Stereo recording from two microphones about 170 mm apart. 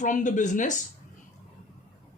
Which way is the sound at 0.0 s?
50° left (ahead or behind).